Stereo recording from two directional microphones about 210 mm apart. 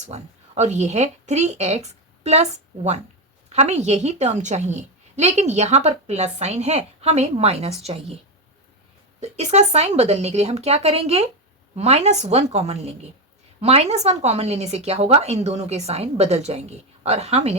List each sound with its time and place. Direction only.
0.0 s a woman's voice: 35° right (ahead or behind)
9.4 s a woman's voice: 30° right (ahead or behind)